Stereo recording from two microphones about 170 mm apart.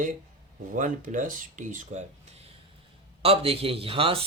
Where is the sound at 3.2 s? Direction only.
35° right (ahead or behind).